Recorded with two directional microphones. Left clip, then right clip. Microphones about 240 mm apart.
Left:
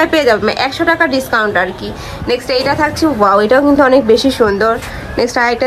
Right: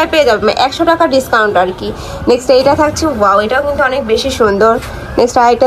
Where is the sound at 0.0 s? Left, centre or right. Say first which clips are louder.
Right 1 dB; centre.